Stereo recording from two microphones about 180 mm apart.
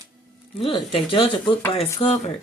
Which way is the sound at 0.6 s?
30° left (ahead or behind).